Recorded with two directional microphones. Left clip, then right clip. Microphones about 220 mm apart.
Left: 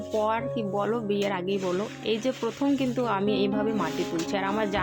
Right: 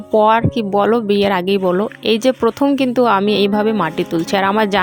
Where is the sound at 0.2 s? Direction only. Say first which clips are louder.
Right 14 dB; 45° right (ahead or behind).